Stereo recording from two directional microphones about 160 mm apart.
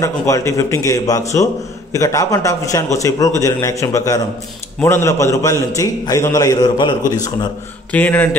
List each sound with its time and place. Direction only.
0.0 s a man's voice: 20° left (ahead or behind)
7.9 s speech: 10° left (ahead or behind)